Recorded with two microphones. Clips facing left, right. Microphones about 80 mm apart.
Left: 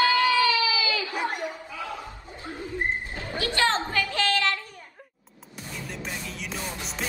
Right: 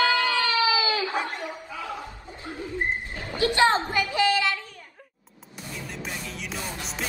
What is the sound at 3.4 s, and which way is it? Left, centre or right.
A woman's voice, right.